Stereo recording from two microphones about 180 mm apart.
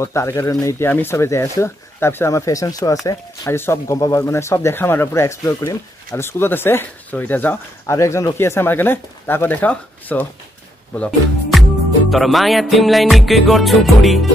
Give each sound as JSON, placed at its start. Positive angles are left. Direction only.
{"t": 0.0, "sound": "speech", "side_deg": 15}
{"t": 11.0, "sound": "music", "side_deg": 5}